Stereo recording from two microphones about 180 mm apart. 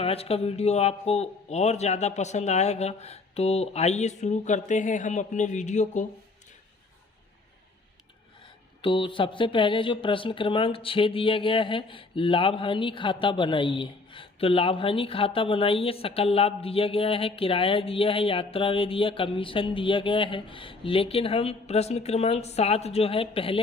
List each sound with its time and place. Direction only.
0.0 s speech: 35° left (ahead or behind)
8.8 s speech: 30° left (ahead or behind)